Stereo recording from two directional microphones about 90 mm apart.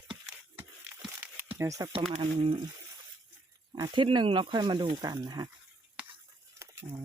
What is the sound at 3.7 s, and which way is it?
Speech, 55° right (ahead or behind).